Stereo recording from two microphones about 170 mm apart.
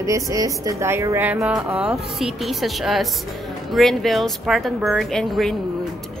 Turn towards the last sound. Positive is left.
turn(degrees=0)  # may be behind; listen again after turning